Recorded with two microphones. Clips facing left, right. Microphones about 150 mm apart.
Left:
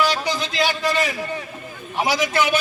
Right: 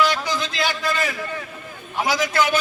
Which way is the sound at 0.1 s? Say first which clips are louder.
Left 1 dB; 15° left (ahead or behind).